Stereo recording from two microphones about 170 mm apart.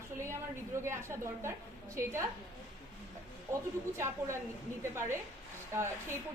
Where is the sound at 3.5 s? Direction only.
15° right (ahead or behind).